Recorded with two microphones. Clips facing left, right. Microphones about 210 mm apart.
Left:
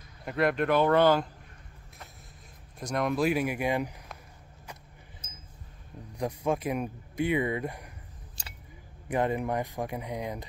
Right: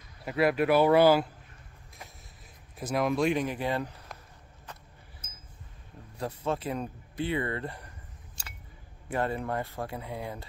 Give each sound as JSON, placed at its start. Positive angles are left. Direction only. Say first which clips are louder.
{"t": 0.2, "sound": "speech", "louder": "right 1 dB", "side_deg": -5}
{"t": 2.8, "sound": "speech", "louder": "right 1 dB", "side_deg": -5}
{"t": 6.1, "sound": "speech", "louder": "left 3 dB", "side_deg": 15}
{"t": 9.1, "sound": "speech", "louder": "left 2 dB", "side_deg": 15}